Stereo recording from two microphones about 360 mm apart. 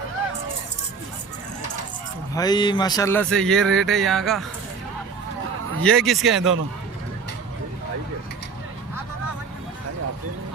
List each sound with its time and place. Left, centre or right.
2.3 s speech: centre
5.8 s speech: centre